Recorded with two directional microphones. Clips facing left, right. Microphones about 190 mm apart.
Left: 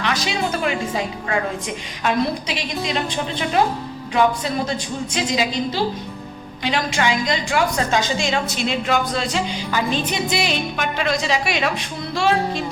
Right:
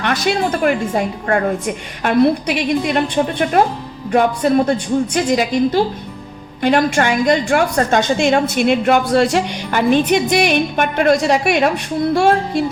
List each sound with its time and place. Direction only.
0.0 s a woman's voice: 55° right (ahead or behind)